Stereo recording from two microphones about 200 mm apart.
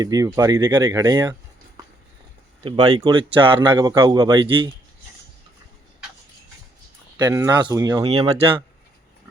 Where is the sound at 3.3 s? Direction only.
10° right (ahead or behind).